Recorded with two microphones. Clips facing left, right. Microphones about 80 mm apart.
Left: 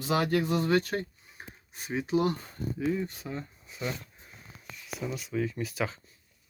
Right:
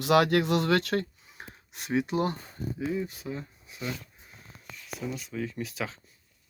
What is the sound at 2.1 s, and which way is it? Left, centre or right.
Speech, right.